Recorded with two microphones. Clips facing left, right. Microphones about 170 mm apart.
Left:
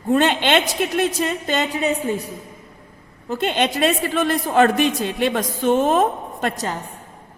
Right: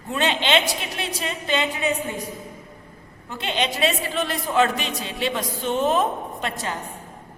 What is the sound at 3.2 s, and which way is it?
A man's voice, 45° left (ahead or behind).